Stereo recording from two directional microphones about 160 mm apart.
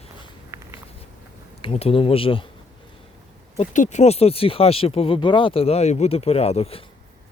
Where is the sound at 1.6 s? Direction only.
35° left (ahead or behind).